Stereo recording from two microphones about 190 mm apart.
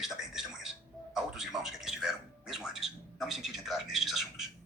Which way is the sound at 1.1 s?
Centre (ahead or behind).